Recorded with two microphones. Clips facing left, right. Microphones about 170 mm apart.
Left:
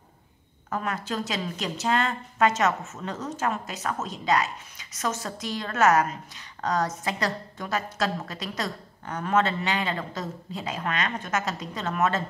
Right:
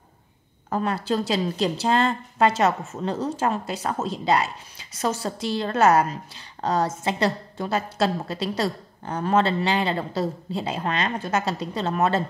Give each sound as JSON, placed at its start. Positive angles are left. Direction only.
{"t": 0.7, "sound": "a woman's voice", "side_deg": -30}